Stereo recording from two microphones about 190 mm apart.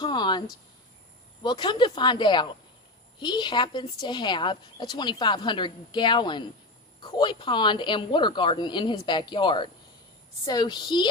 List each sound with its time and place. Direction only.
0.0 s speech: 25° left (ahead or behind)